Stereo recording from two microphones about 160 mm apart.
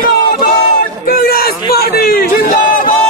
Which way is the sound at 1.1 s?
70° left (ahead or behind).